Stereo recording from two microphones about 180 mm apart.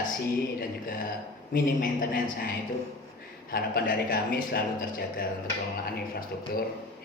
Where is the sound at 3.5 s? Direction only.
55° left (ahead or behind).